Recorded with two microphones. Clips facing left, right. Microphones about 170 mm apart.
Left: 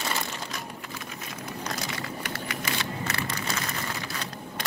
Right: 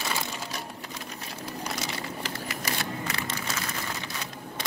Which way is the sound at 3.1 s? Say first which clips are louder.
Left 1 dB; 20° right (ahead or behind).